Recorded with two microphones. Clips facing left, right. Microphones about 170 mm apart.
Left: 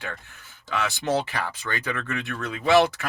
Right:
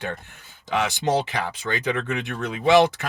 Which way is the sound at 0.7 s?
20° right (ahead or behind).